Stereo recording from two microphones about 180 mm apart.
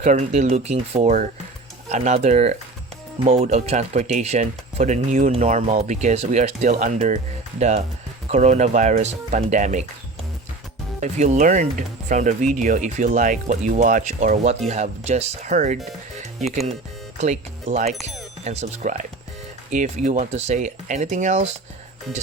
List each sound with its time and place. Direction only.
0.0 s speech: 40° right (ahead or behind)
8.3 s speech: 40° right (ahead or behind)
11.0 s speech: 40° right (ahead or behind)
17.2 s speech: 40° right (ahead or behind)